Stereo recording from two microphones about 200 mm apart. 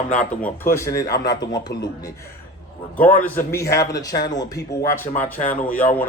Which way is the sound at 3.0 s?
10° left (ahead or behind).